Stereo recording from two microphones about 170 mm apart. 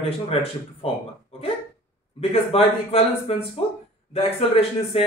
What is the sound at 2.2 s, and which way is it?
Speech, 35° left (ahead or behind).